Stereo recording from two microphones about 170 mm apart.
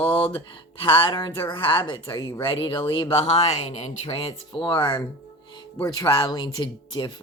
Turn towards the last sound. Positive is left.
turn(degrees=25)  # may be behind; listen again after turning